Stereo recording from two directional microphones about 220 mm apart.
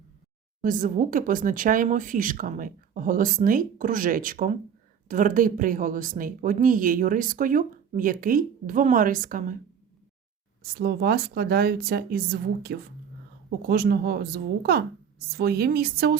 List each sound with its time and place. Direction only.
0.6 s speech: 35° right (ahead or behind)
10.6 s a woman's voice: 45° right (ahead or behind)